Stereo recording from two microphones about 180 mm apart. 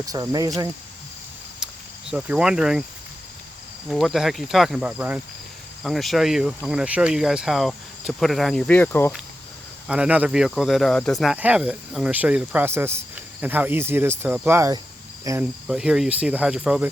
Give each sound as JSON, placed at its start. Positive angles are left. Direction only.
{"t": 0.0, "sound": "speech", "side_deg": -20}
{"t": 1.5, "sound": "cricket", "side_deg": -5}
{"t": 3.8, "sound": "speech", "side_deg": 0}
{"t": 9.8, "sound": "speech", "side_deg": -5}
{"t": 15.2, "sound": "cricket", "side_deg": -15}
{"t": 15.6, "sound": "speech", "side_deg": -5}